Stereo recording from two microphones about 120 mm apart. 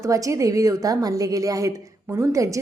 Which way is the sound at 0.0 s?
25° right (ahead or behind).